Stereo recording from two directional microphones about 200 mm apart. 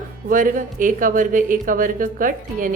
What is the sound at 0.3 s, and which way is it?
Speech, 40° right (ahead or behind).